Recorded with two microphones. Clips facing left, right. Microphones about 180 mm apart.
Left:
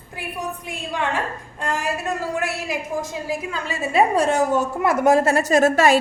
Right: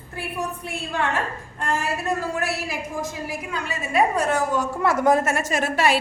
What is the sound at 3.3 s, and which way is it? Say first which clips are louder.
A woman's voice: left 3 dB; 25° left (ahead or behind).